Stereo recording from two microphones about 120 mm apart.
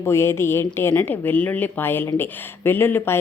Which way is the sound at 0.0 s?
20° left (ahead or behind).